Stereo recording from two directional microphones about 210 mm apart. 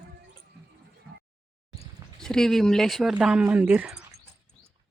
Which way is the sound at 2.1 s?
Centre (ahead or behind).